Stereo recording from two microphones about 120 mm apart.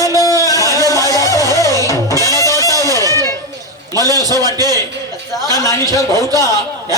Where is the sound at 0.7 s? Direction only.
30° left (ahead or behind).